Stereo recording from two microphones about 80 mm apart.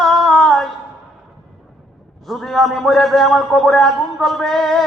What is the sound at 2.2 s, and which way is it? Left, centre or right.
A man's voice, centre.